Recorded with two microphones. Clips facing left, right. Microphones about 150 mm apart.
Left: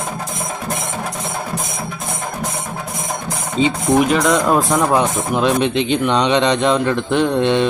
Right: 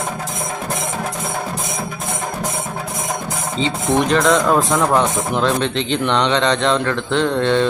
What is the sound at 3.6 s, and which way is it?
Speech, 15° left (ahead or behind).